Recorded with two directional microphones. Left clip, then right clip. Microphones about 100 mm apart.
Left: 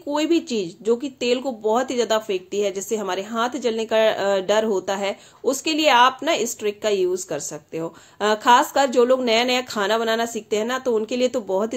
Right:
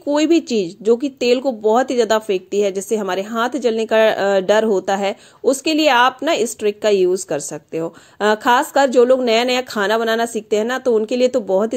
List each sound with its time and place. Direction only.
0.1 s speech: 65° right (ahead or behind); by 11.7 s 45° right (ahead or behind)